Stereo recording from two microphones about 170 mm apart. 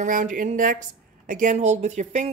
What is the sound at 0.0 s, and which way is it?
A woman's voice, 50° right (ahead or behind).